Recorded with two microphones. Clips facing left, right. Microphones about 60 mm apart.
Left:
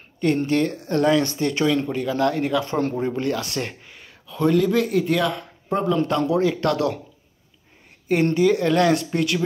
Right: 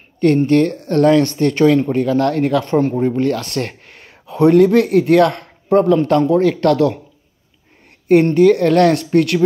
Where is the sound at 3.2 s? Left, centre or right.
Right.